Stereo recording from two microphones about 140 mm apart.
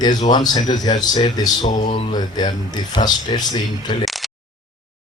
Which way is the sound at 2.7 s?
30° left (ahead or behind).